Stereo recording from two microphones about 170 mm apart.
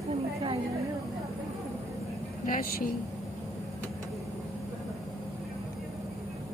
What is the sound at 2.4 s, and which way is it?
Speech, 50° left (ahead or behind).